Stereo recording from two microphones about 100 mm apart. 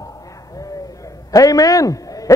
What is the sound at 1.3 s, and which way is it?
A man's voice, 35° left (ahead or behind).